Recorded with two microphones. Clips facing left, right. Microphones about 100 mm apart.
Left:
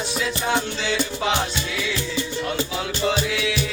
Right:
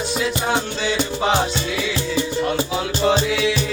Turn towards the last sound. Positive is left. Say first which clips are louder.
# right 5 dB
turn(degrees=-25)  # may be behind; listen again after turning